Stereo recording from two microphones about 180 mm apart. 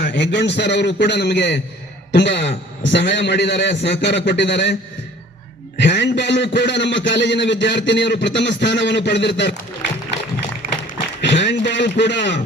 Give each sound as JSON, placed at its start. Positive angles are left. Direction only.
{"t": 0.1, "sound": "a man's voice", "side_deg": 75}
{"t": 11.2, "sound": "a man's voice", "side_deg": 80}